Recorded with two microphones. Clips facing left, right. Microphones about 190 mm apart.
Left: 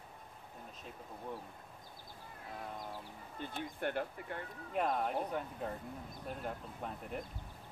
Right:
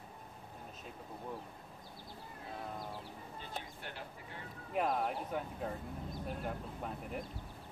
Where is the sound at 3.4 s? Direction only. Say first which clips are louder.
Left 8 dB; 55° left (ahead or behind).